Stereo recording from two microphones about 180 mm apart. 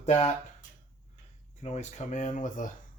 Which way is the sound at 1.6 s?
40° left (ahead or behind).